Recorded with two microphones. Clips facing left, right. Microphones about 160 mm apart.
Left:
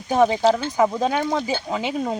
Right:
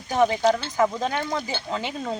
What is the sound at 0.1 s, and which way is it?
Speech, 20° left (ahead or behind).